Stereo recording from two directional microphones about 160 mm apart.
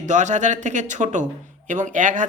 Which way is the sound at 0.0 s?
50° right (ahead or behind).